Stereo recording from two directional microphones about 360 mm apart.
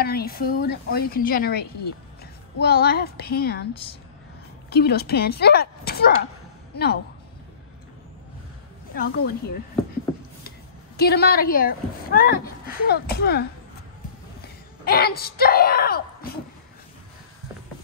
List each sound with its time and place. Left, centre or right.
0.0 s a woman's voice: left
2.6 s a woman's voice: left
4.6 s a woman's voice: left
8.9 s a woman's voice: left
11.0 s a woman's voice: left
14.9 s speech: left